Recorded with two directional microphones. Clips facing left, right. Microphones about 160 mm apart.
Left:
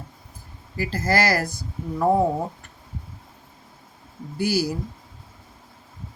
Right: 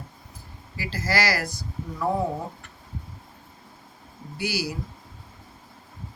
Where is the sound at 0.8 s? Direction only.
45° left (ahead or behind).